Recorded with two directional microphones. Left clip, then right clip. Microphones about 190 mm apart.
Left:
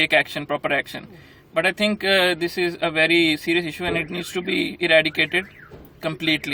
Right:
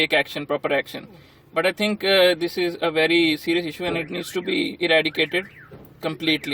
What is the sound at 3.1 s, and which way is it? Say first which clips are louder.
Speech: left 1 dB; 15° right (ahead or behind).